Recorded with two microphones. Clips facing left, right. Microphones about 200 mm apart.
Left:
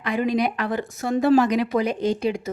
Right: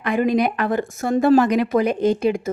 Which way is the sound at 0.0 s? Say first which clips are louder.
Right 3 dB; 50° right (ahead or behind).